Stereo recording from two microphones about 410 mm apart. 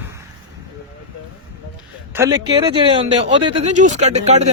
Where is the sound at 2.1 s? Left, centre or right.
Centre.